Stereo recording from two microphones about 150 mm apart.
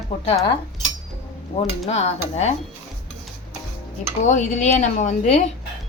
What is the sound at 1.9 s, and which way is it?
Speech, 45° left (ahead or behind).